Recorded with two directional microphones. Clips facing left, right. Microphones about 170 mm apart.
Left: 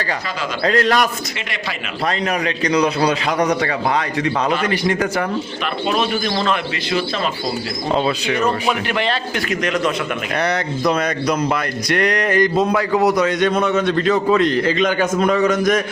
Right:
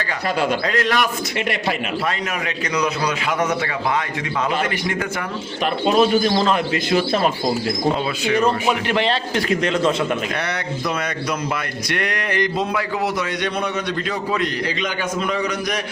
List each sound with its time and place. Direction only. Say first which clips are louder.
0.6 s a man's voice: left 4 dB; 35° left (ahead or behind)
2.7 s a man's voice: left 5 dB; 30° left (ahead or behind)
6.0 s a man's voice: right 4 dB; 35° right (ahead or behind)
8.6 s a man's voice: even; 25° right (ahead or behind)
10.4 s a man's voice: left 6 dB; 40° left (ahead or behind)